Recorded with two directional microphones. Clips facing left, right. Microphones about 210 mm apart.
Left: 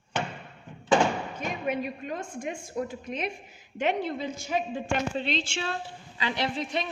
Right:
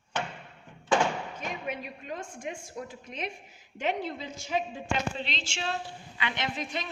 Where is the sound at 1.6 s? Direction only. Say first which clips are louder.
Left 7 dB; 50° left (ahead or behind).